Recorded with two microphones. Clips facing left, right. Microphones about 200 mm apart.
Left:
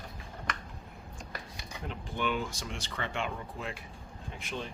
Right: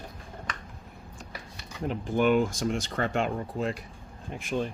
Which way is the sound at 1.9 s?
45° right (ahead or behind).